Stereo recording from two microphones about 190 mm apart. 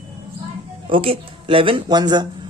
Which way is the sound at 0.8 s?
30° right (ahead or behind).